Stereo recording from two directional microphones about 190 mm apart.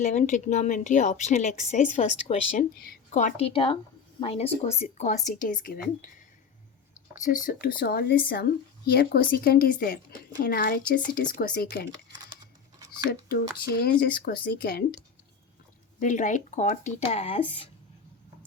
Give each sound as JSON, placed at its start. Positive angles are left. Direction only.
{"t": 0.0, "sound": "a woman's voice", "side_deg": 40}
{"t": 7.3, "sound": "speech", "side_deg": 50}
{"t": 13.1, "sound": "speech", "side_deg": 55}
{"t": 16.0, "sound": "a woman's voice", "side_deg": 40}